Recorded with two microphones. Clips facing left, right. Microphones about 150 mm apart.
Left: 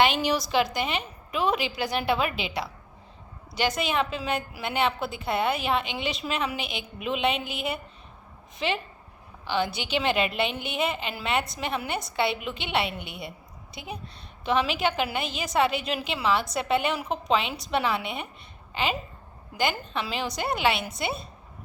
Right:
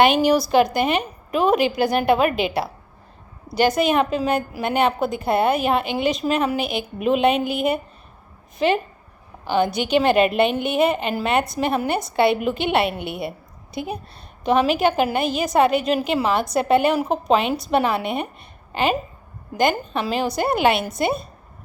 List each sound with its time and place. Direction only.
0.0 s a woman's voice: 50° right (ahead or behind)
3.6 s a woman's voice: 50° right (ahead or behind)
14.4 s a woman's voice: 45° right (ahead or behind)